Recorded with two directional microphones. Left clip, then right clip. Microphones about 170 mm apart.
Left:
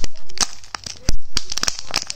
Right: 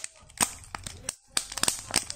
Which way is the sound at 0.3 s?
25° left (ahead or behind).